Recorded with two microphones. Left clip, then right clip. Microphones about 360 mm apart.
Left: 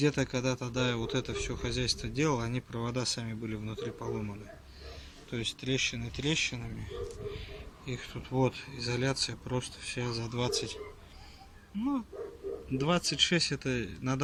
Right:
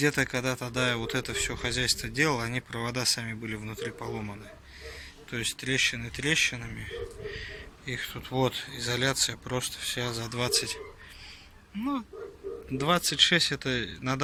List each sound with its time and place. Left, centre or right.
0.0 s speech: centre
5.3 s speech: centre
11.8 s speech: centre